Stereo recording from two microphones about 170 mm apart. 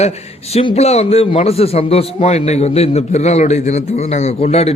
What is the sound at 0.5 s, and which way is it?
A man's voice, 35° left (ahead or behind).